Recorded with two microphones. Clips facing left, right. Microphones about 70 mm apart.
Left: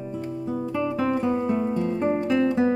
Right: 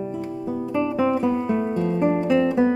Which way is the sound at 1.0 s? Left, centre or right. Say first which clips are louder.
Right 4 dB; centre.